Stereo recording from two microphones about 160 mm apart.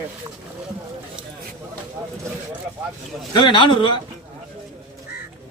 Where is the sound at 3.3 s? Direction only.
30° left (ahead or behind).